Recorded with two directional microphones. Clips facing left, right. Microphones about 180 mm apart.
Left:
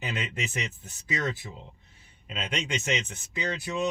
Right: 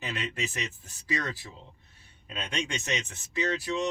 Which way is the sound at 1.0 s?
25° left (ahead or behind).